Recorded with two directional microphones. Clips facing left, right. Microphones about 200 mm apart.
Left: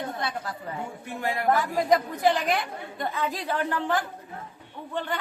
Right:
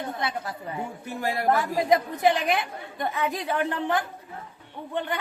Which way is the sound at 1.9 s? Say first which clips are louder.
Right 1 dB; 20° right (ahead or behind).